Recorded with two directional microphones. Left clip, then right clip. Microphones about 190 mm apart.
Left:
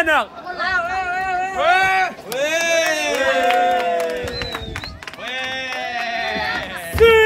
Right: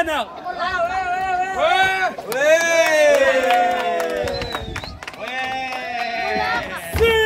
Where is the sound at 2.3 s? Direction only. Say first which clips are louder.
Right 5 dB; 35° left (ahead or behind).